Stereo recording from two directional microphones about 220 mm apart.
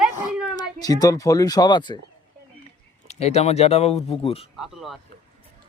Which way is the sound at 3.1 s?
30° left (ahead or behind).